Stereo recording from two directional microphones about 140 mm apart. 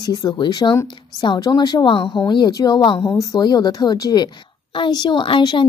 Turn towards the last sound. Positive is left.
turn(degrees=35)  # may be behind; listen again after turning